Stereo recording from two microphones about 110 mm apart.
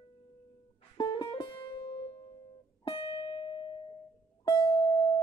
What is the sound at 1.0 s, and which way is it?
Music, 45° left (ahead or behind).